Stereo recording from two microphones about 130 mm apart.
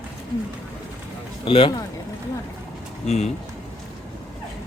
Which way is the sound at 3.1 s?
55° left (ahead or behind).